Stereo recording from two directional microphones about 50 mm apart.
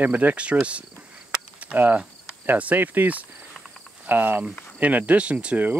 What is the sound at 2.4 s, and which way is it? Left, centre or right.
Speech, right.